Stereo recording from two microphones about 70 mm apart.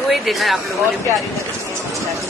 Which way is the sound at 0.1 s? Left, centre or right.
Centre.